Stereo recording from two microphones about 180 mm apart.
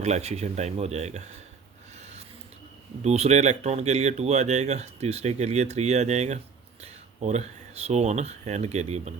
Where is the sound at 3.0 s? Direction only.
35° right (ahead or behind).